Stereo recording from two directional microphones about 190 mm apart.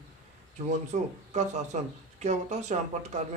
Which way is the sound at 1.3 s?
40° right (ahead or behind).